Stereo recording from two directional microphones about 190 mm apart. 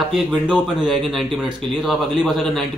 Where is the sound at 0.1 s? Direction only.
5° right (ahead or behind).